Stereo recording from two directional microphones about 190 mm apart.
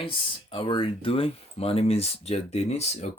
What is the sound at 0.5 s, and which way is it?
Speech, 25° left (ahead or behind).